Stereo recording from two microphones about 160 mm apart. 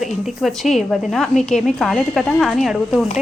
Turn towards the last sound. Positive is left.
turn(degrees=0)  # may be behind; listen again after turning